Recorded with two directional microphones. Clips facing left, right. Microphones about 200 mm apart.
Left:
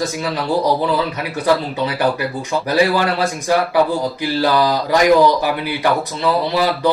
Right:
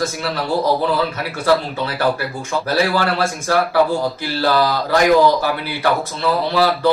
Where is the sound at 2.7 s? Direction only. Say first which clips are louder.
Left 2 dB; 15° left (ahead or behind).